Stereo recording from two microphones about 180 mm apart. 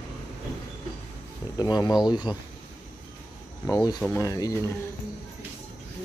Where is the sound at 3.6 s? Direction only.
20° left (ahead or behind).